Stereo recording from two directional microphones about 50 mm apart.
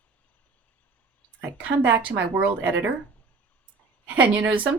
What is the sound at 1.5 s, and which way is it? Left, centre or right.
Speech, right.